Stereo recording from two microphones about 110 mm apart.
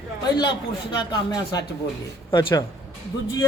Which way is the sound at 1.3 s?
40° left (ahead or behind).